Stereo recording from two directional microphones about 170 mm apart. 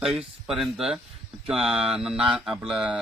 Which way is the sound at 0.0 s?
5° right (ahead or behind).